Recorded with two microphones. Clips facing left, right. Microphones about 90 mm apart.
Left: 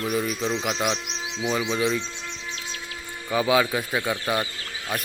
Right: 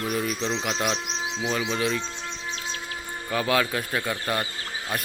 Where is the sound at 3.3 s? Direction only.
10° left (ahead or behind).